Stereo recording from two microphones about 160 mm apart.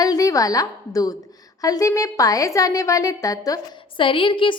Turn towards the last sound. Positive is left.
turn(degrees=30)  # may be behind; listen again after turning